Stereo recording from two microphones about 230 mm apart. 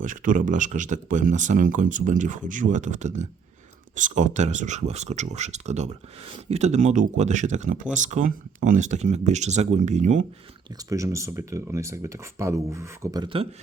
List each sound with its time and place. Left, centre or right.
0.0 s speech: right
10.7 s speech: centre